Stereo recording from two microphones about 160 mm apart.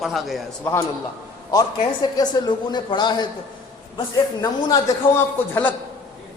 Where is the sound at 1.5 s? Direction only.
25° left (ahead or behind).